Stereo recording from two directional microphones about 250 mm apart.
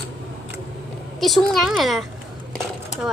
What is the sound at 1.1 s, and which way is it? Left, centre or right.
A child's voice, centre.